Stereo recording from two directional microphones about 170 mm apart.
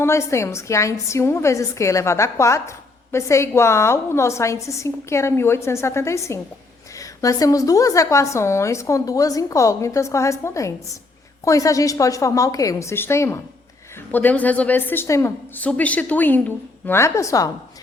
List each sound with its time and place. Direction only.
0.0 s a woman's voice: 15° left (ahead or behind)